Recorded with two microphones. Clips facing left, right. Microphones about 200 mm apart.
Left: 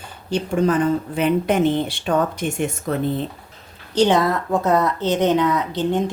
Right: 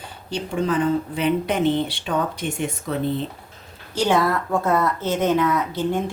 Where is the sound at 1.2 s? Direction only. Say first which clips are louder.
Left 3 dB; 50° left (ahead or behind).